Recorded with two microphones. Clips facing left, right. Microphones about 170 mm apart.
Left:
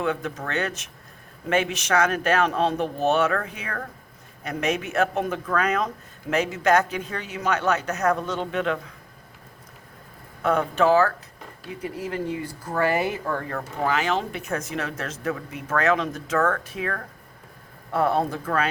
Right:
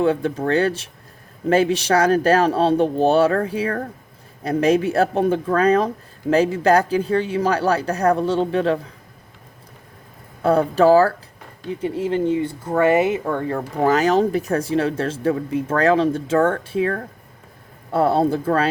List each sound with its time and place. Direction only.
0.0 s speech: 30° right (ahead or behind)
10.4 s speech: 35° right (ahead or behind)
13.8 s speech: 40° right (ahead or behind)